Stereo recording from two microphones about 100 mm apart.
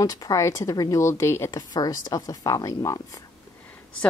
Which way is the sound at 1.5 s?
40° left (ahead or behind).